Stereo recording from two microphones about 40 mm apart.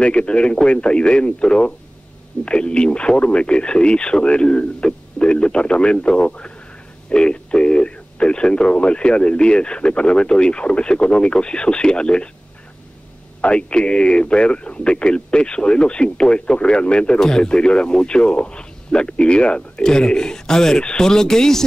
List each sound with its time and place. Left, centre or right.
0.0 s speech: left
13.4 s speech: left